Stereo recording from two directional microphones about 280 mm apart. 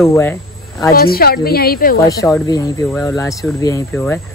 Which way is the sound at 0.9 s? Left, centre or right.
Left.